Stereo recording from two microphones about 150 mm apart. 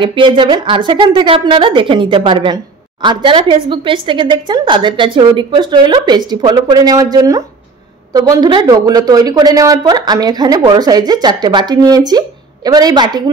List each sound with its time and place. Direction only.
0.0 s a woman's voice: 35° right (ahead or behind)